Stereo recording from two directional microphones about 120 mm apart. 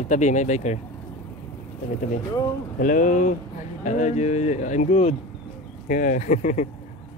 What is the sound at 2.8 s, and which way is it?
Speech, 90° left.